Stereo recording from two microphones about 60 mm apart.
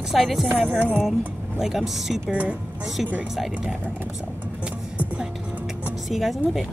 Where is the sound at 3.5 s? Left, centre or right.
Centre.